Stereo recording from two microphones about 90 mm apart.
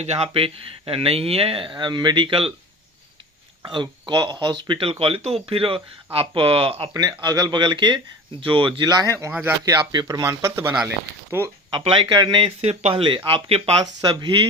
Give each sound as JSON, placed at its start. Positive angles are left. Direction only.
{"t": 0.3, "sound": "speech", "side_deg": -90}
{"t": 3.7, "sound": "speech", "side_deg": -60}
{"t": 4.7, "sound": "speech", "side_deg": -90}
{"t": 6.9, "sound": "speech", "side_deg": -45}
{"t": 8.8, "sound": "speech", "side_deg": -45}
{"t": 9.6, "sound": "speech", "side_deg": -50}
{"t": 10.2, "sound": "speech", "side_deg": -30}
{"t": 11.7, "sound": "speech", "side_deg": -70}
{"t": 14.0, "sound": "speech", "side_deg": -60}